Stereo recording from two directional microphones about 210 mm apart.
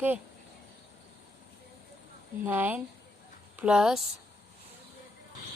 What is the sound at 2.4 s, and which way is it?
Speech, 10° right (ahead or behind).